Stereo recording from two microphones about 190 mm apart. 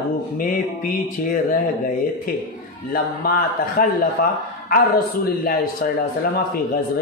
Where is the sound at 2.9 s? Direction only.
50° left (ahead or behind).